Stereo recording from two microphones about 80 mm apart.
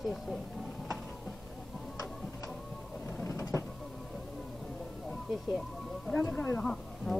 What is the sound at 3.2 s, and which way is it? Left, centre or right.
Vehicle, left.